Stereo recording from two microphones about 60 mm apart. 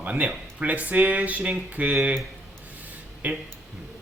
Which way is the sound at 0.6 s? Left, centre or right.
Right.